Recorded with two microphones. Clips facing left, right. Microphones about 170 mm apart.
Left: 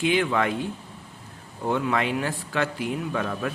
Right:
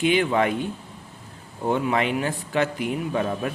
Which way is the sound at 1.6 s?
20° right (ahead or behind).